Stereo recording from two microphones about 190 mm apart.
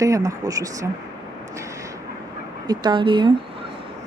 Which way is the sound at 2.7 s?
25° right (ahead or behind).